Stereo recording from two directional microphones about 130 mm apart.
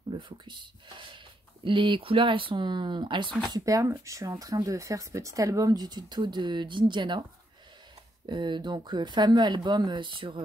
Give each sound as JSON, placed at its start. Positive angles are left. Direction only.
{"t": 0.1, "sound": "speech", "side_deg": -40}
{"t": 3.5, "sound": "speech", "side_deg": -25}
{"t": 8.3, "sound": "speech", "side_deg": -35}